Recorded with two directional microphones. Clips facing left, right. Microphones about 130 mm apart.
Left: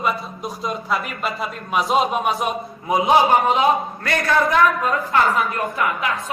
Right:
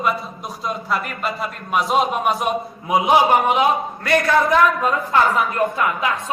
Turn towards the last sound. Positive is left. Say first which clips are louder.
# right 1 dB
turn(degrees=-25)  # may be behind; listen again after turning